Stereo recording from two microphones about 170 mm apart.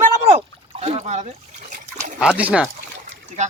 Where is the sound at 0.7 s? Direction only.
35° right (ahead or behind).